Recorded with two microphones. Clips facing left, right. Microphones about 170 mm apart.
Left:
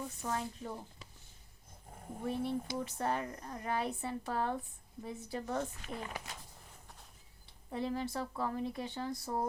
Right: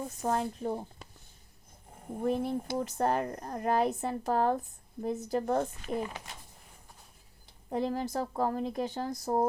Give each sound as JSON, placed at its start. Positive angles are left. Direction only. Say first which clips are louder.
{"t": 0.0, "sound": "speech", "louder": "right 7 dB", "side_deg": -45}
{"t": 2.4, "sound": "speech", "louder": "right 4 dB", "side_deg": -45}
{"t": 7.7, "sound": "speech", "louder": "right 5 dB", "side_deg": -40}